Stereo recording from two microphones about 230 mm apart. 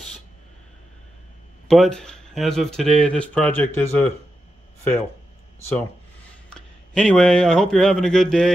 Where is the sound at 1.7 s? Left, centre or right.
Centre.